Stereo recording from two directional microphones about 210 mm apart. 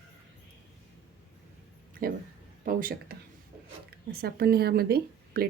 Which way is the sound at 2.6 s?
40° right (ahead or behind).